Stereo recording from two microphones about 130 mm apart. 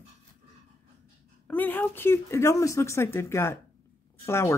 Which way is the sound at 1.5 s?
15° left (ahead or behind).